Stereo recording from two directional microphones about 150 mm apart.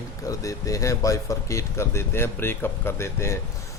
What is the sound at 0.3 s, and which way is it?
A man's voice, 20° left (ahead or behind).